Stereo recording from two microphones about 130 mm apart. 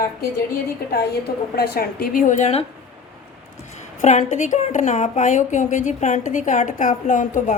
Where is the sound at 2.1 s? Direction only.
80° left.